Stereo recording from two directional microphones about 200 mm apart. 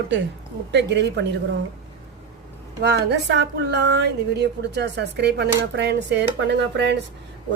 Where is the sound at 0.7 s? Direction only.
60° right (ahead or behind).